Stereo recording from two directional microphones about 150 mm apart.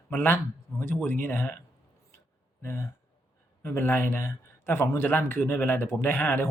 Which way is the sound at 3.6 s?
15° left (ahead or behind).